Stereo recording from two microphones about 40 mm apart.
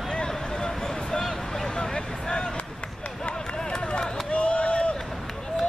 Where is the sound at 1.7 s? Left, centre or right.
Left.